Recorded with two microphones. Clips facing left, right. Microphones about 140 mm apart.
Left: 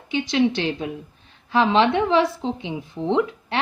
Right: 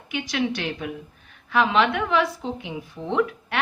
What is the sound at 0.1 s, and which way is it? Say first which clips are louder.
A woman's voice: left 6 dB; 25° left (ahead or behind).